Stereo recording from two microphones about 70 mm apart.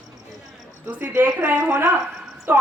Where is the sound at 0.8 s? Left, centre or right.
Right.